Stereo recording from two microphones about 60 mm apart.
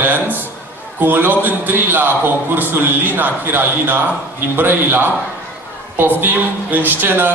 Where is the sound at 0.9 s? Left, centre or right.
Right.